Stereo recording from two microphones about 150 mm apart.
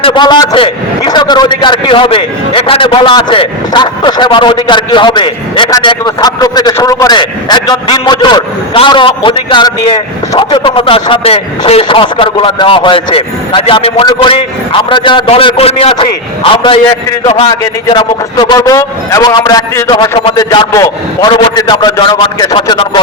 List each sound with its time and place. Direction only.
0.0 s a man's voice: 30° left (ahead or behind)